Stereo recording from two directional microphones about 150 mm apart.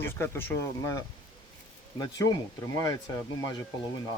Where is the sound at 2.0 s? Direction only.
25° left (ahead or behind).